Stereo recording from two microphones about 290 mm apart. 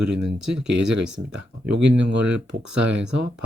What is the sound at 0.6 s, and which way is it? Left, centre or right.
Speech, right.